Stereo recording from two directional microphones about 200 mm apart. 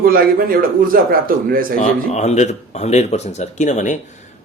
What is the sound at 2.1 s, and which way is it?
Speech, 35° left (ahead or behind).